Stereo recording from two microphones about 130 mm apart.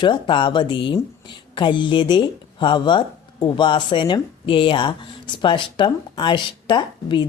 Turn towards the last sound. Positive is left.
turn(degrees=40)  # may be behind; listen again after turning